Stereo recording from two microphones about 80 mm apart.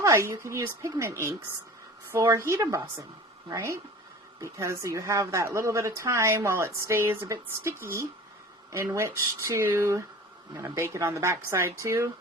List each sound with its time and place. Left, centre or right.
0.0 s speech: right